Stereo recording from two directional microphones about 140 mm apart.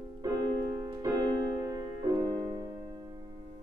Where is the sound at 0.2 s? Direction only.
25° right (ahead or behind).